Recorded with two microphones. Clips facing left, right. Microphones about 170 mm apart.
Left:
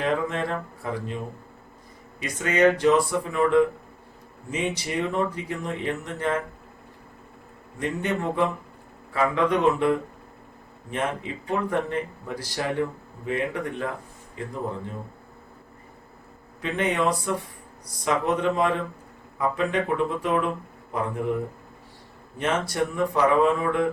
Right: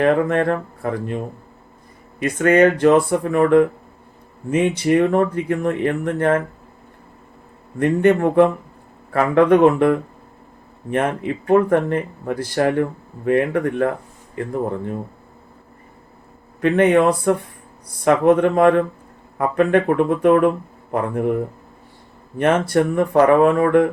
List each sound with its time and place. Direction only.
0.0 s speech: 55° right (ahead or behind)
7.8 s speech: 55° right (ahead or behind)
16.6 s speech: 55° right (ahead or behind)
22.4 s speech: 55° right (ahead or behind)